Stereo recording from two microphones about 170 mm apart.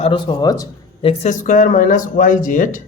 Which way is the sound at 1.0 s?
45° left (ahead or behind).